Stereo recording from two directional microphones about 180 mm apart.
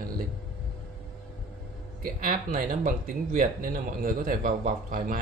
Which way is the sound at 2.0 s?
50° right (ahead or behind).